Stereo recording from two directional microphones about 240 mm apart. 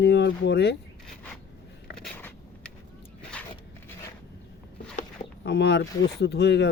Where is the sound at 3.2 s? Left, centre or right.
Centre.